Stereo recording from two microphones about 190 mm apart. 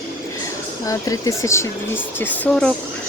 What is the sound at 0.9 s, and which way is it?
Speech, 15° left (ahead or behind).